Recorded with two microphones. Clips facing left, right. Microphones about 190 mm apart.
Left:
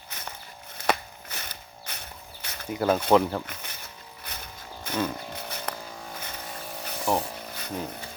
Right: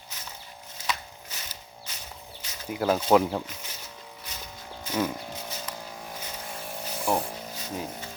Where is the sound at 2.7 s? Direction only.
5° right (ahead or behind).